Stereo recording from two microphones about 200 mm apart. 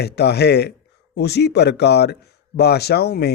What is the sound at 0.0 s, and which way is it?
Speech, 55° left (ahead or behind).